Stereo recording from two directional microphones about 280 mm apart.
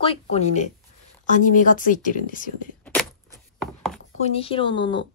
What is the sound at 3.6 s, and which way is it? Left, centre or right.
Chopping, centre.